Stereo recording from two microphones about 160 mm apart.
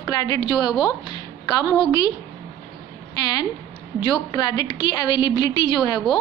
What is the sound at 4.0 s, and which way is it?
A woman's voice, 25° left (ahead or behind).